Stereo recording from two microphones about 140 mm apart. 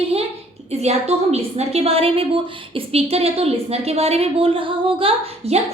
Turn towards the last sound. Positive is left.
turn(degrees=-45)  # may be behind; listen again after turning